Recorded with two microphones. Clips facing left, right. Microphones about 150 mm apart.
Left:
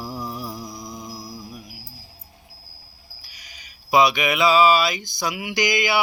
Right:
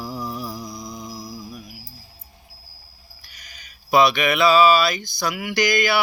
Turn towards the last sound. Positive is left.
turn(degrees=20)  # may be behind; listen again after turning